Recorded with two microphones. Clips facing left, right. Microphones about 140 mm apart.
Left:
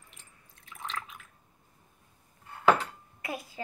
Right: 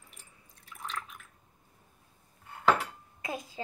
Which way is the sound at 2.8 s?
20° right (ahead or behind).